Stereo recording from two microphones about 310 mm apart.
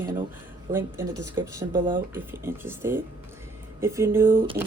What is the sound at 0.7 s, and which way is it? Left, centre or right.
Speech, centre.